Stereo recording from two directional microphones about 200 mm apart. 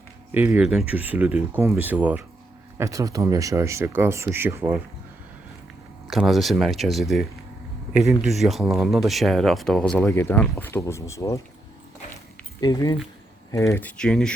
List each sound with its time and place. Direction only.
0.3 s speech: 10° right (ahead or behind)
6.1 s speech: centre (ahead or behind); by 11.4 s 15° left (ahead or behind)
12.5 s speech: 20° left (ahead or behind); by 14.3 s 5° left (ahead or behind)